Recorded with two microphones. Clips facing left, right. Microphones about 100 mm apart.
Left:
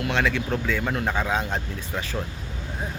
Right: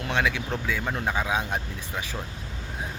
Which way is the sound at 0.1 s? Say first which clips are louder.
Even; 15° right (ahead or behind).